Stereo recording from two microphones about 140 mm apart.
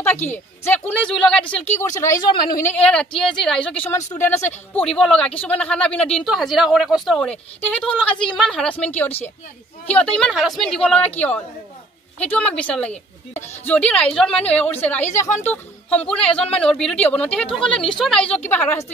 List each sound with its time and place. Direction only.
0.3 s speech: 15° left (ahead or behind)
1.8 s speech: 20° left (ahead or behind)
2.0 s speech: 70° left (ahead or behind)
2.6 s speech: 10° left (ahead or behind)
7.2 s speech: 10° left (ahead or behind)